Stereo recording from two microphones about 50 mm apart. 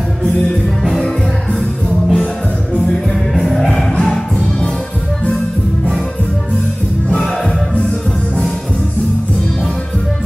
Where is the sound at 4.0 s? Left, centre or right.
Centre.